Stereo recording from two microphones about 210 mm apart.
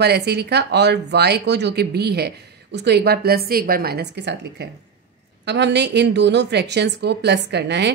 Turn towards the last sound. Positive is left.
turn(degrees=-55)  # may be behind; listen again after turning